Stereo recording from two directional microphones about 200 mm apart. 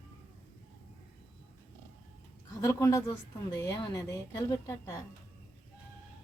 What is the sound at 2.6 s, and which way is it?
A woman's voice, 15° left (ahead or behind).